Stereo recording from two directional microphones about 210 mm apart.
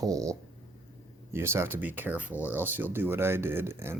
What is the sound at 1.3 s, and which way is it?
Speech, 10° right (ahead or behind).